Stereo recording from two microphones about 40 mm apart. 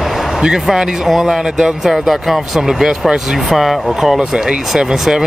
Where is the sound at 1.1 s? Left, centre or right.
Centre.